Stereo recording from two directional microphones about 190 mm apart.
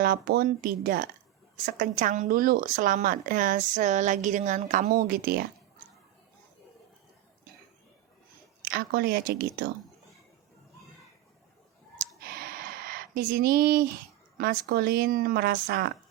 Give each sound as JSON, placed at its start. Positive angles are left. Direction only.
{"t": 0.0, "sound": "speech", "side_deg": -50}
{"t": 8.6, "sound": "speech", "side_deg": -55}
{"t": 12.6, "sound": "a sound", "side_deg": -50}
{"t": 14.3, "sound": "speech", "side_deg": -55}